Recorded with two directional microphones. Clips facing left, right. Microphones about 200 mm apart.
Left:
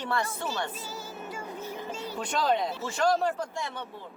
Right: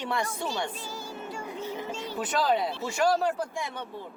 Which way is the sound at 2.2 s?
5° right (ahead or behind).